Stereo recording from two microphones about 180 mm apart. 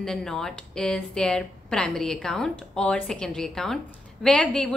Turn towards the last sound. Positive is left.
turn(degrees=5)  # may be behind; listen again after turning